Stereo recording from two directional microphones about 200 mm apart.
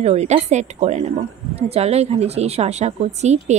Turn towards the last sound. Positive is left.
turn(degrees=-35)  # may be behind; listen again after turning